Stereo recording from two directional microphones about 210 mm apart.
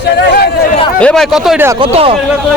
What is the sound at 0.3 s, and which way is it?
Speech, 50° left (ahead or behind).